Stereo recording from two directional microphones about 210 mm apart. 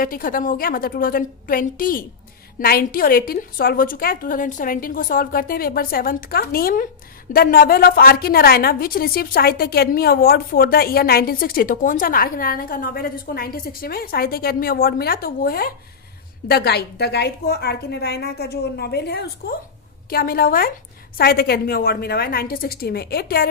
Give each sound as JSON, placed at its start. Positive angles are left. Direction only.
{"t": 0.0, "sound": "a woman's voice", "side_deg": 40}